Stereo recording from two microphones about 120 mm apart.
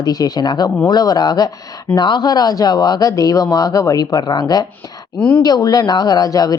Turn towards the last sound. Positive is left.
turn(degrees=30)  # may be behind; listen again after turning